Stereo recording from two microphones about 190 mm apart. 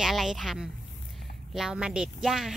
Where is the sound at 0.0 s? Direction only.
Centre (ahead or behind).